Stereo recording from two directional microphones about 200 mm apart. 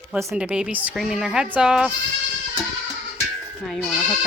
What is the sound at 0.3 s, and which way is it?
Speech, 5° right (ahead or behind).